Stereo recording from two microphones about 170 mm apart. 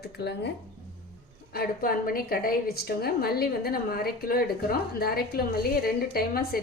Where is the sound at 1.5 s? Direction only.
60° left (ahead or behind).